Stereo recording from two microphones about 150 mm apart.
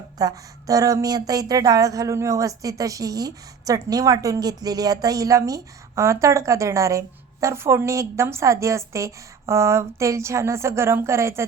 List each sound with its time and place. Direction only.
0.2 s a woman's voice: 25° right (ahead or behind)